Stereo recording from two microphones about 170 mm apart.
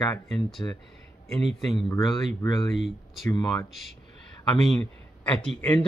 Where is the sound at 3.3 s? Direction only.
20° left (ahead or behind).